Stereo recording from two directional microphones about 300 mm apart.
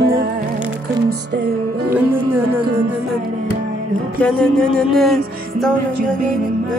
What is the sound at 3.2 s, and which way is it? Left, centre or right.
Music, right.